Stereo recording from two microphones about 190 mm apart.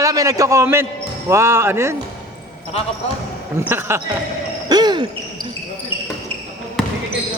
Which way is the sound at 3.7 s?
10° right (ahead or behind).